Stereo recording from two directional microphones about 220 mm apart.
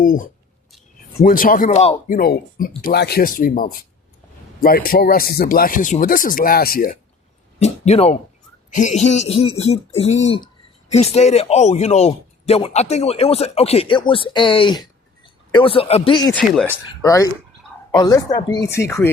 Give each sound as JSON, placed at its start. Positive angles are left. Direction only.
{"t": 0.0, "sound": "speech", "side_deg": 40}
{"t": 2.1, "sound": "speech", "side_deg": 45}
{"t": 7.6, "sound": "speech", "side_deg": 30}